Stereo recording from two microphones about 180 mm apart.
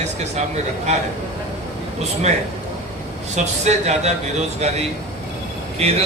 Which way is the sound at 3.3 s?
40° right (ahead or behind).